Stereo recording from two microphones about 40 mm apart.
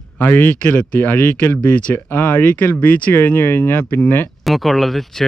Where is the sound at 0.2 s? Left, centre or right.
Left.